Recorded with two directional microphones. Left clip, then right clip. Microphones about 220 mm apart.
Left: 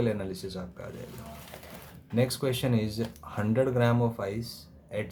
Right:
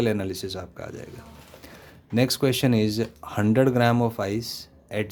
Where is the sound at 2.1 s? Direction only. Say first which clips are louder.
Right 6 dB; 40° right (ahead or behind).